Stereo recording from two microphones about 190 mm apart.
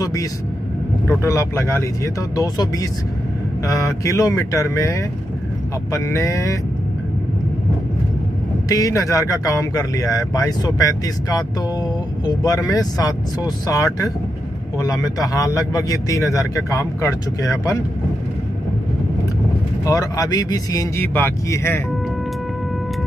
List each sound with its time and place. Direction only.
0.0 s a man's voice: 20° left (ahead or behind)
8.6 s a man's voice: 15° left (ahead or behind)
12.4 s a man's voice: 20° left (ahead or behind)
19.8 s speech: 20° left (ahead or behind)